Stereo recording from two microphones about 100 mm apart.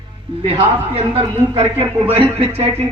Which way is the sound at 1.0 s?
85° right.